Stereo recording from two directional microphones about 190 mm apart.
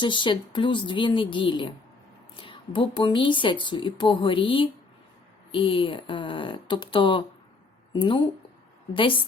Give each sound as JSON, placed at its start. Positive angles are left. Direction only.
{"t": 0.0, "sound": "a woman's voice", "side_deg": 25}